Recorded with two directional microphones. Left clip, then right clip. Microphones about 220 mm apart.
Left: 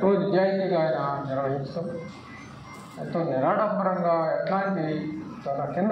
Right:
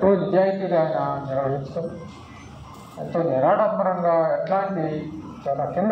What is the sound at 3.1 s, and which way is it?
Speech, 40° right (ahead or behind).